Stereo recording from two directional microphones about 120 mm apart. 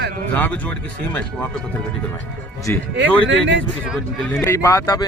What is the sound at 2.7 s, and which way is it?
Speech, 15° left (ahead or behind).